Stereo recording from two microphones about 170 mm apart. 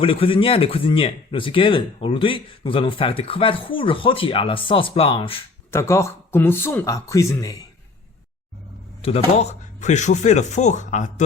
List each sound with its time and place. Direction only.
0.0 s speech: 30° left (ahead or behind)
5.7 s speech: 15° left (ahead or behind)
9.0 s speech: 35° left (ahead or behind)